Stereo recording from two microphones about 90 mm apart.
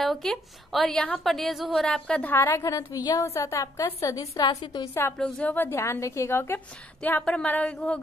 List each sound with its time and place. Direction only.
0.0 s a woman's voice: 5° left (ahead or behind)
2.3 s a woman's voice: 25° left (ahead or behind)
3.1 s a woman's voice: 40° left (ahead or behind)
5.2 s speech: 15° left (ahead or behind)
5.7 s a woman's voice: 30° left (ahead or behind)
7.0 s speech: 15° left (ahead or behind)